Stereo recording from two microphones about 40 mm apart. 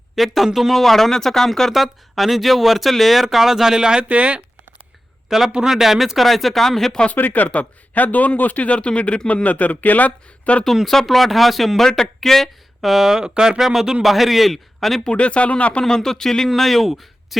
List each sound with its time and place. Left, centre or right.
0.2 s speech: centre
0.7 s speech: centre
1.7 s speech: centre
4.1 s speech: right
5.3 s speech: centre
7.1 s speech: left
10.8 s speech: centre
12.8 s speech: centre
14.0 s speech: centre
15.1 s speech: left
16.0 s speech: centre